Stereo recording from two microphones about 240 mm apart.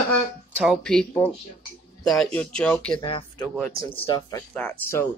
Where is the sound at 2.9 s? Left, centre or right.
Centre.